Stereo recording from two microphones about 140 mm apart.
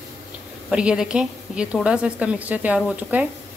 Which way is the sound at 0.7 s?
5° right (ahead or behind).